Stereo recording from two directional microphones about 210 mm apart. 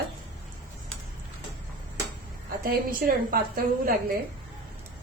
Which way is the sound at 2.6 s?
45° right (ahead or behind).